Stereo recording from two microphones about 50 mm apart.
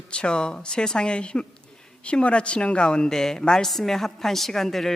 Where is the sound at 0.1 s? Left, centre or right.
Centre.